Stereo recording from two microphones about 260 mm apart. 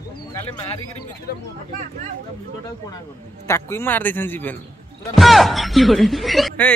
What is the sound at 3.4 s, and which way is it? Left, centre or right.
A man's voice, centre.